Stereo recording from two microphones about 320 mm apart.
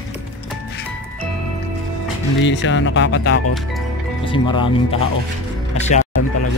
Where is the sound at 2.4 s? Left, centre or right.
Left.